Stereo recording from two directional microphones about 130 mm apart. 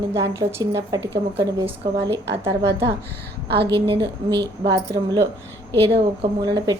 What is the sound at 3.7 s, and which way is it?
A woman's voice, 40° right (ahead or behind).